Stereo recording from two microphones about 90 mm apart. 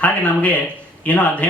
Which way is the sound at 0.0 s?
15° left (ahead or behind).